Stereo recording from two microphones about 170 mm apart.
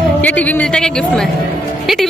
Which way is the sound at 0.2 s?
10° left (ahead or behind).